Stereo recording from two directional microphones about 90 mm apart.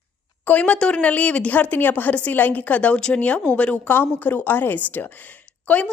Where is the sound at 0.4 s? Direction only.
15° left (ahead or behind).